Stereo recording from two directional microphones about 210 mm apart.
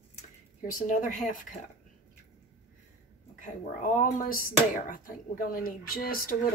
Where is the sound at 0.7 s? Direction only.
40° left (ahead or behind).